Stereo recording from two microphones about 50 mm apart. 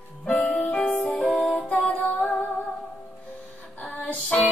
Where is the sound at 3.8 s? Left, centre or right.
Left.